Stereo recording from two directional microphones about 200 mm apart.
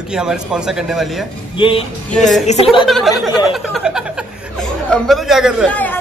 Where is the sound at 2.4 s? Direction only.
30° left (ahead or behind).